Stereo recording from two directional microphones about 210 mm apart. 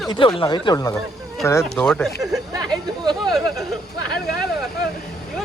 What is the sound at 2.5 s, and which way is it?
Chatter, 20° right (ahead or behind).